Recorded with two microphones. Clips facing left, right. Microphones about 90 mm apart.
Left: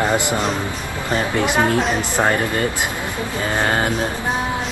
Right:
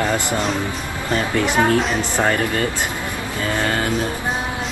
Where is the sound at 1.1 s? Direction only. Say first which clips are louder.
Even; 20° left (ahead or behind).